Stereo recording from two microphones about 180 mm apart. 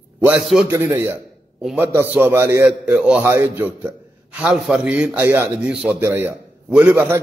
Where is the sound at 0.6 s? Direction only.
15° right (ahead or behind).